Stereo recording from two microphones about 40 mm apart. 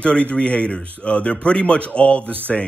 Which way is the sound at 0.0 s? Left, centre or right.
Left.